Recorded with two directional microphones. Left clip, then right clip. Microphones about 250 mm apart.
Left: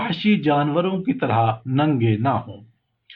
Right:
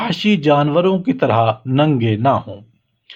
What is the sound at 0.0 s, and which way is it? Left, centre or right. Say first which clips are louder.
Speech: right 4 dB; right.